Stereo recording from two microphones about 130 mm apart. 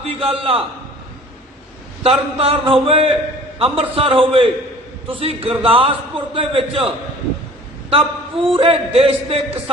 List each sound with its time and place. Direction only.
0.0 s a man's voice: 45° right (ahead or behind)
2.0 s a man's voice: 50° right (ahead or behind)